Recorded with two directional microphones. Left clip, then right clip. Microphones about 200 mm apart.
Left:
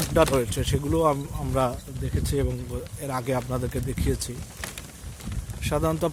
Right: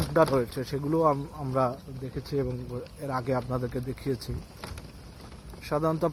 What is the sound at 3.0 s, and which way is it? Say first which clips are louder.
Speech: left 2 dB; 25° left (ahead or behind).